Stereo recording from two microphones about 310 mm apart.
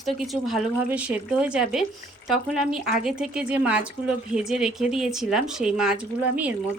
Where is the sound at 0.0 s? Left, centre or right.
Centre.